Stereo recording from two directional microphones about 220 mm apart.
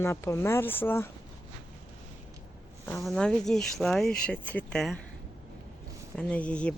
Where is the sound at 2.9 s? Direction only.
Centre (ahead or behind).